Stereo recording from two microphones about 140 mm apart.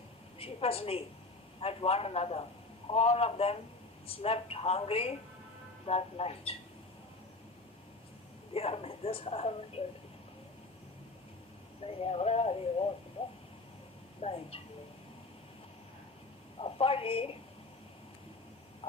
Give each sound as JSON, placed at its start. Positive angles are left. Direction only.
{"t": 0.3, "sound": "speech", "side_deg": 45}
{"t": 8.5, "sound": "speech", "side_deg": 45}
{"t": 11.8, "sound": "speech", "side_deg": 45}
{"t": 14.2, "sound": "speech", "side_deg": 45}
{"t": 16.6, "sound": "a woman's voice", "side_deg": 40}